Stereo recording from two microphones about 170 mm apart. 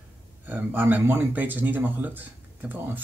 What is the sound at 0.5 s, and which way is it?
Speech, 10° right (ahead or behind).